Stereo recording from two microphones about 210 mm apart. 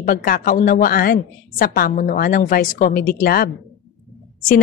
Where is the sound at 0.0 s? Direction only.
40° left (ahead or behind).